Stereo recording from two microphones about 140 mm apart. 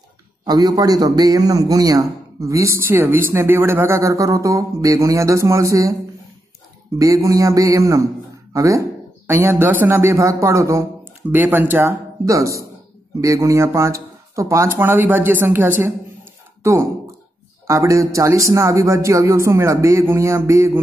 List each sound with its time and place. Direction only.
0.5 s a man's voice: 25° right (ahead or behind)
7.0 s a man's voice: 25° right (ahead or behind)